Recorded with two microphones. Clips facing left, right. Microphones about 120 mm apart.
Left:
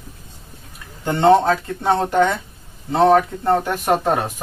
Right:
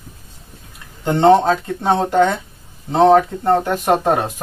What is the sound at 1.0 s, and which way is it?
Speech, 15° right (ahead or behind).